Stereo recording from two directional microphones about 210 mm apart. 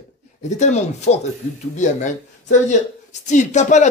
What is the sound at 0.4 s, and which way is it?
A woman's voice, 35° left (ahead or behind).